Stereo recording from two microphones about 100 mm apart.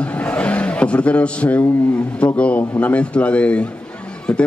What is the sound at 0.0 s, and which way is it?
A man's voice, 15° left (ahead or behind).